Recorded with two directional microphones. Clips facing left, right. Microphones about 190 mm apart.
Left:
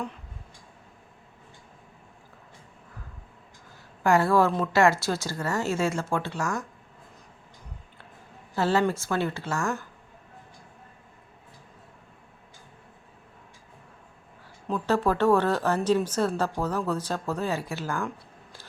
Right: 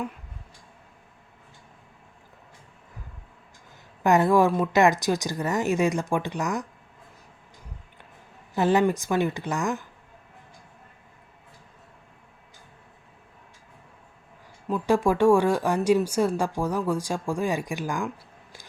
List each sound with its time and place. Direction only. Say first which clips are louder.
4.0 s a woman's voice: right 2 dB; 20° right (ahead or behind)
8.5 s a woman's voice: right 3 dB; 15° right (ahead or behind)
14.7 s a woman's voice: right 2 dB; 10° right (ahead or behind)